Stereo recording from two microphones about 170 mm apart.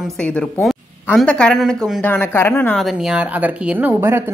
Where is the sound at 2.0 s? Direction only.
10° left (ahead or behind).